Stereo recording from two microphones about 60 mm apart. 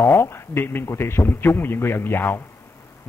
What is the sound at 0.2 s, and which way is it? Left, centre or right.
A man's voice, left.